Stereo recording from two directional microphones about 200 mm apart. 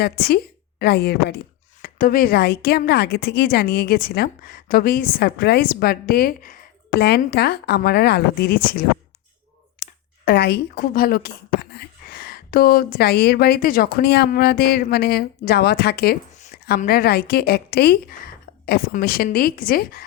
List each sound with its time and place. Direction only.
0.0 s speech: 50° left (ahead or behind)
9.8 s speech: 55° left (ahead or behind)